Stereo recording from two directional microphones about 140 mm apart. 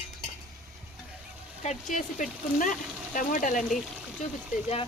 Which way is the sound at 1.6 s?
60° left (ahead or behind).